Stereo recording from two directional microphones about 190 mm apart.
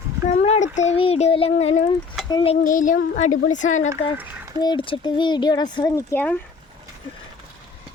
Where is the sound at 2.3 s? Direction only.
25° left (ahead or behind).